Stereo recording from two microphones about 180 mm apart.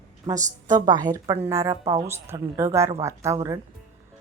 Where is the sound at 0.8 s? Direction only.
25° right (ahead or behind).